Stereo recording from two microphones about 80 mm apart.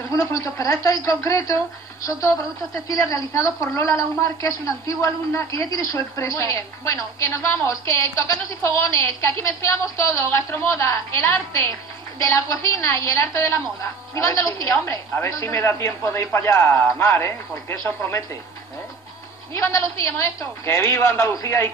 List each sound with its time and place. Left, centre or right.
0.1 s a woman's voice: left
19.5 s a woman's voice: left